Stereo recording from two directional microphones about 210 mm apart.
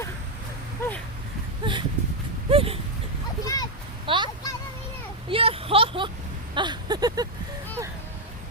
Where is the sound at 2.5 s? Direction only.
25° right (ahead or behind).